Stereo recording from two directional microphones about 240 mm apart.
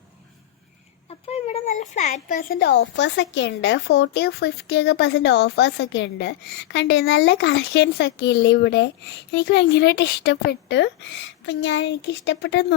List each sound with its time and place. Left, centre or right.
1.3 s speech: left